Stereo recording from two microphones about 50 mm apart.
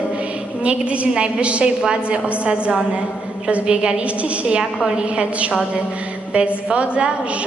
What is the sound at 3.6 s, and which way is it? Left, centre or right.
A woman's voice, centre.